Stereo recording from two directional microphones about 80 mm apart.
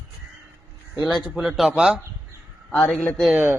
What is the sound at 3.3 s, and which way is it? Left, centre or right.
Speech, right.